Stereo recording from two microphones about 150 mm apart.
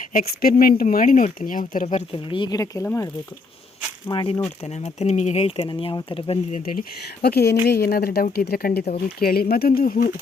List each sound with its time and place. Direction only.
0.1 s speech: 70° left (ahead or behind); by 2.0 s 55° left (ahead or behind)
2.1 s speech: 30° left (ahead or behind); by 3.1 s 15° left (ahead or behind)
4.1 s speech: 35° left (ahead or behind)
4.6 s speech: 45° left (ahead or behind)
5.6 s speech: 30° left (ahead or behind)
7.2 s speech: 90° left; by 10.2 s 70° left (ahead or behind)